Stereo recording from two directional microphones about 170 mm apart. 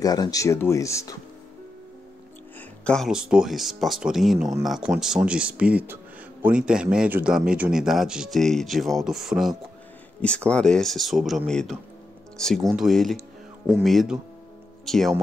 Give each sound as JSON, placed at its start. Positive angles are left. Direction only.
{"t": 0.0, "sound": "speech", "side_deg": 20}
{"t": 2.8, "sound": "a man's voice", "side_deg": 5}